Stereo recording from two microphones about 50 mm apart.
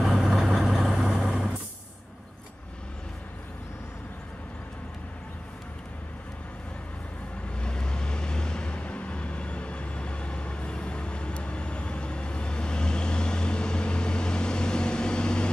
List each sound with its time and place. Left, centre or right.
0.0 s vehicle: centre
7.5 s vehicle: centre